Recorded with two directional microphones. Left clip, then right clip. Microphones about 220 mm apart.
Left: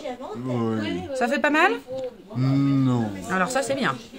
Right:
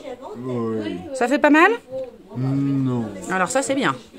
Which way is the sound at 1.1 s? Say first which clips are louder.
Right 5 dB; 55° right (ahead or behind).